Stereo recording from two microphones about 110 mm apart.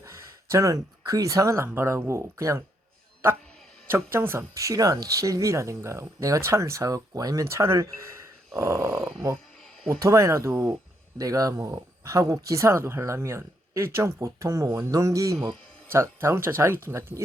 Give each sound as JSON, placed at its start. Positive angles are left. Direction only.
{"t": 0.0, "sound": "speech", "side_deg": -30}
{"t": 3.8, "sound": "speech", "side_deg": -20}